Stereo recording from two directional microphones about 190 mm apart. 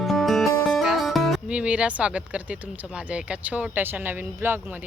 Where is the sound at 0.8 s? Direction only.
Centre (ahead or behind).